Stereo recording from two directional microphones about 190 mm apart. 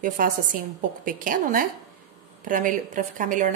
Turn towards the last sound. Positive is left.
turn(degrees=-40)  # may be behind; listen again after turning